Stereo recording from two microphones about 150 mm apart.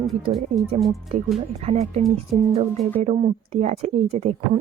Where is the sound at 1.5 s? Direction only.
45° right (ahead or behind).